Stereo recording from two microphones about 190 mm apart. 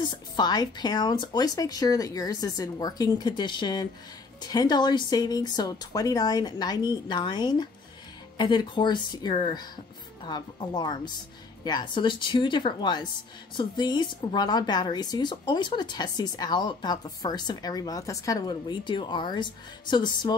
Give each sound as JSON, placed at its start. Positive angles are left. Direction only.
{"t": 0.0, "sound": "speech", "side_deg": 20}